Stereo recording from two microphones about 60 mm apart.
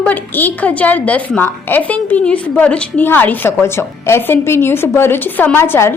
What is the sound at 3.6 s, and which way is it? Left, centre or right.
A woman's voice, left.